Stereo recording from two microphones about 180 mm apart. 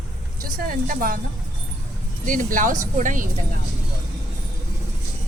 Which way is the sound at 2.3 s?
45° right (ahead or behind).